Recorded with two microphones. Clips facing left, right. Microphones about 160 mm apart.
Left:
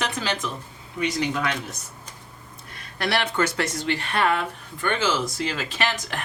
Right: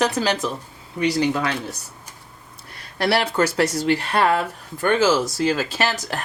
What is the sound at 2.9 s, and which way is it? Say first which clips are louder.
Speech: right 4 dB; 30° right (ahead or behind).